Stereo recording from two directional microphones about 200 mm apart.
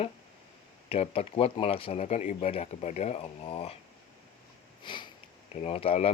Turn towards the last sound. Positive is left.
turn(degrees=30)  # may be behind; listen again after turning